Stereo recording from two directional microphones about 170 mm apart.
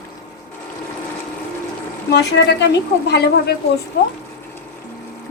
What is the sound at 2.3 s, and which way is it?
Speech, 90° left.